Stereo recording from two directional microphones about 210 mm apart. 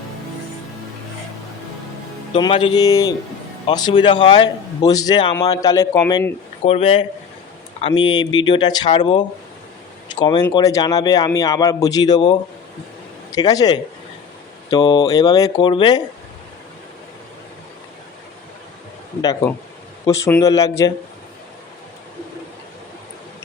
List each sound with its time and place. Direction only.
2.3 s a man's voice: 25° left (ahead or behind)
19.2 s a man's voice: 15° left (ahead or behind)